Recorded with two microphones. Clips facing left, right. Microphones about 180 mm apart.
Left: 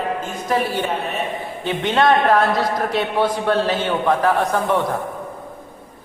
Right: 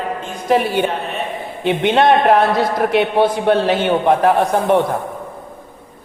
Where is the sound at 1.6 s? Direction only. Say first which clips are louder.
Right 7 dB; 65° right (ahead or behind).